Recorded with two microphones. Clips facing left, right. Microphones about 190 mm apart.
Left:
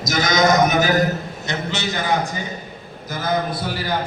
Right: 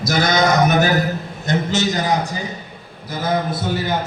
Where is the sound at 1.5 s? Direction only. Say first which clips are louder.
Right 6 dB; 45° right (ahead or behind).